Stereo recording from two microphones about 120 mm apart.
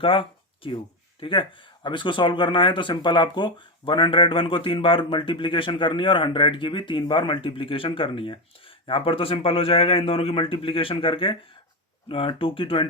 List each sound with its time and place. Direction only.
0.0 s speech: 45° left (ahead or behind)